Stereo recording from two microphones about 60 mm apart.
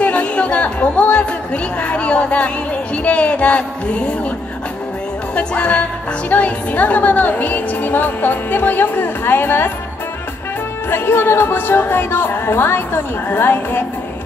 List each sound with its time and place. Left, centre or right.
0.0 s a woman's voice: left
5.3 s speech: centre; by 9.7 s left
10.9 s speech: left